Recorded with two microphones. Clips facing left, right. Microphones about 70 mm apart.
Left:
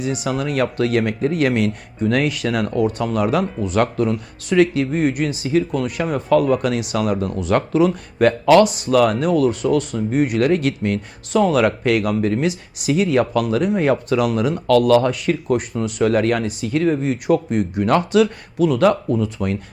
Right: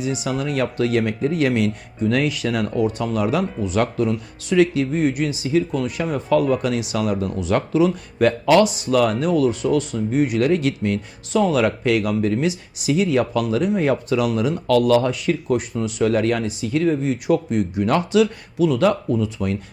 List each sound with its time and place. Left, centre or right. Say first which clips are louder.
0.0 s speech: left 1 dB; left